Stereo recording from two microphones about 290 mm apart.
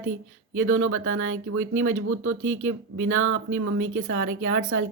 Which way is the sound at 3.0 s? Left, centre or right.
Right.